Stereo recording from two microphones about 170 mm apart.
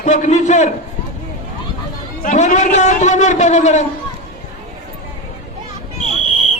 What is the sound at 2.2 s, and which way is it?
A man's voice, 50° left (ahead or behind).